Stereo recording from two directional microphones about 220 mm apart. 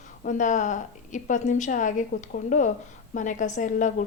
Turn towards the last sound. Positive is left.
turn(degrees=35)  # may be behind; listen again after turning